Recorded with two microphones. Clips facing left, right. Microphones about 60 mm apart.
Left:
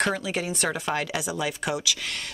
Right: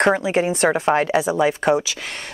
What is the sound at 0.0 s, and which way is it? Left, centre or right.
A woman's voice, right.